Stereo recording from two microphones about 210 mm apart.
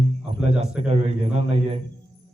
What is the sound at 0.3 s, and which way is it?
A man's voice, 30° right (ahead or behind).